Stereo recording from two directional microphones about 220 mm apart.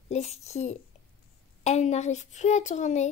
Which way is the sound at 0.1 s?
30° left (ahead or behind).